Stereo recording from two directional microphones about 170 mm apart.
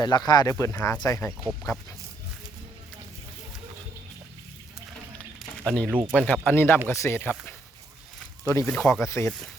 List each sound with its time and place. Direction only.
0.0 s speech: 25° left (ahead or behind)
5.6 s speech: 10° left (ahead or behind)
5.9 s speech: 10° right (ahead or behind)
6.1 s speech: 10° left (ahead or behind)
8.7 s speech: 5° left (ahead or behind)
9.0 s speech: 15° left (ahead or behind)